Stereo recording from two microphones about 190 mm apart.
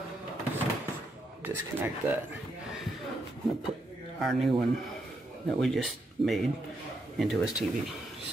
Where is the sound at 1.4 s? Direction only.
10° right (ahead or behind).